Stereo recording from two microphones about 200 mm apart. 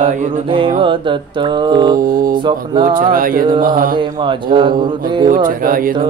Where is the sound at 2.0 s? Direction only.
45° right (ahead or behind).